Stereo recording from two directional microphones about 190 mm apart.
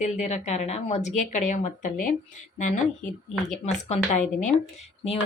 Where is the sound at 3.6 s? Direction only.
35° left (ahead or behind).